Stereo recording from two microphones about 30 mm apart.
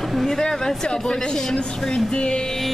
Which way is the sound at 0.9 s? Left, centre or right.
Left.